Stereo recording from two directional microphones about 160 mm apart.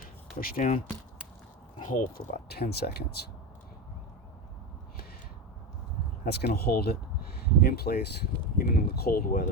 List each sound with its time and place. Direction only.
0.3 s speech: 65° left (ahead or behind)
1.8 s speech: 55° left (ahead or behind); by 3.2 s 80° left
6.2 s speech: 85° left; by 9.5 s 60° left (ahead or behind)